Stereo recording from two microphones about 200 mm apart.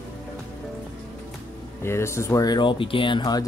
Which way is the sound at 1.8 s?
15° left (ahead or behind).